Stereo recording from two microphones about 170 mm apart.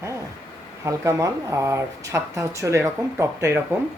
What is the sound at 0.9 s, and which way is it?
Speech, 20° right (ahead or behind).